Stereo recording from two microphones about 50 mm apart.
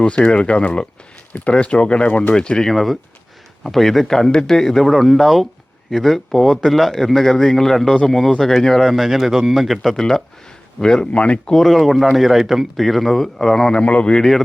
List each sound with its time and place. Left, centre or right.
0.0 s speech: left
2.0 s speech: left
2.3 s speech: centre
9.9 s speech: centre
11.5 s speech: centre
13.8 s speech: left
14.2 s speech: centre